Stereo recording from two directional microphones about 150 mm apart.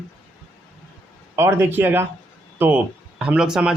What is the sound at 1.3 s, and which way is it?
A man's voice, 15° right (ahead or behind).